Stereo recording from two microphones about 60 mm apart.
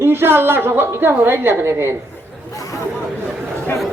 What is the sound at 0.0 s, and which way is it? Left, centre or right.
A woman's voice, right.